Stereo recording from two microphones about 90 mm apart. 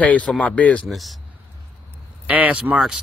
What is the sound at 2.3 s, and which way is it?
Speech, 15° right (ahead or behind).